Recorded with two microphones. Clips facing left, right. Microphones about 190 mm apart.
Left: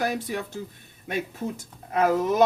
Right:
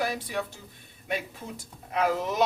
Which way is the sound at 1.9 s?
45° left (ahead or behind).